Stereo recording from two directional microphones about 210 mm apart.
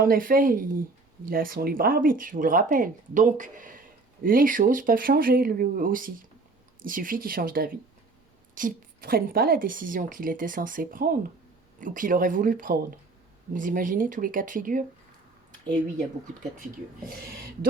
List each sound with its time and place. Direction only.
0.0 s speech: 40° right (ahead or behind)